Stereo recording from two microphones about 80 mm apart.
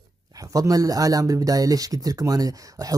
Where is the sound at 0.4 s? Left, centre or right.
Right.